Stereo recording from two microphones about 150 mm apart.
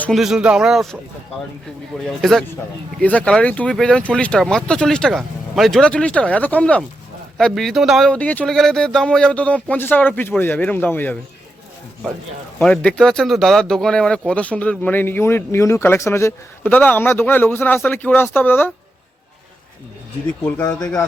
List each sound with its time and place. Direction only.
0.0 s a man's voice: centre (ahead or behind)
2.0 s a man's voice: centre (ahead or behind)
12.5 s speech: 5° left (ahead or behind)